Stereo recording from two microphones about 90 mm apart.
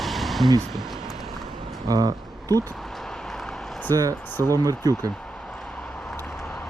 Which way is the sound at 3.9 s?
45° right (ahead or behind).